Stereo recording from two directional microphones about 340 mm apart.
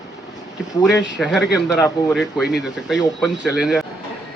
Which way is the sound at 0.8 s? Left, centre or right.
Centre.